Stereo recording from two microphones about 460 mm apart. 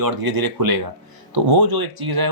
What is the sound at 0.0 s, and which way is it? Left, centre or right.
Speech, right.